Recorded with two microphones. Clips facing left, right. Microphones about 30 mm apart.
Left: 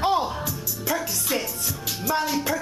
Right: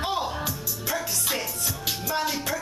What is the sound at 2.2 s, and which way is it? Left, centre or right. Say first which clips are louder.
Music: left 3 dB; centre.